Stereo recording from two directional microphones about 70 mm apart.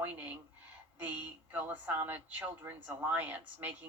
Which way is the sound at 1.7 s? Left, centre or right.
Right.